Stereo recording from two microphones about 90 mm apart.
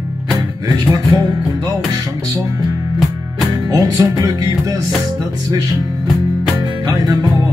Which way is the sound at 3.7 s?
45° right (ahead or behind).